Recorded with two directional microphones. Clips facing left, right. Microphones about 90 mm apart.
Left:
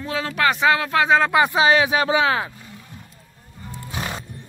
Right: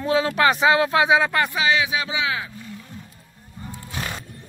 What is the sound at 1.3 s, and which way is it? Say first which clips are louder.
Speech: left 5 dB; 15° left (ahead or behind).